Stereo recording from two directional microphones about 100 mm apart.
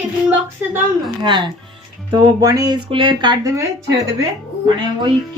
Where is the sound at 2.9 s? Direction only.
55° right (ahead or behind).